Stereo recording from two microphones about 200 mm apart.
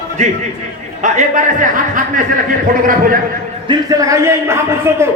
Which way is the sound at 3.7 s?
15° right (ahead or behind).